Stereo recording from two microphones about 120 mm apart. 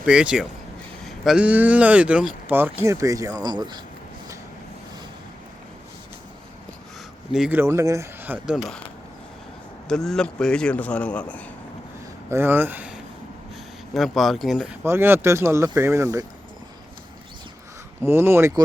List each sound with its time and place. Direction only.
0.0 s speech: 10° right (ahead or behind); by 3.8 s 35° right (ahead or behind)
7.5 s speech: 25° right (ahead or behind)
8.2 s speech: 15° right (ahead or behind)
8.5 s speech: centre (ahead or behind)
9.9 s a man's voice: 5° left (ahead or behind)
12.3 s speech: 20° right (ahead or behind)
13.9 s speech: centre (ahead or behind)
14.8 s speech: 20° right (ahead or behind)
18.0 s speech: 20° right (ahead or behind)